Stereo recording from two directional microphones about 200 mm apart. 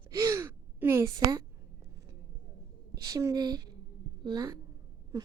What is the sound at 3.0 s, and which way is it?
A woman's voice, 15° right (ahead or behind).